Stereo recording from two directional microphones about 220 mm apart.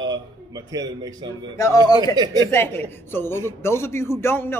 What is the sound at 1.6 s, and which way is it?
A man's voice, 15° left (ahead or behind).